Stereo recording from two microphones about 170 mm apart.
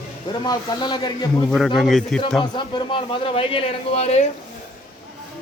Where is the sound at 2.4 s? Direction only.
25° left (ahead or behind).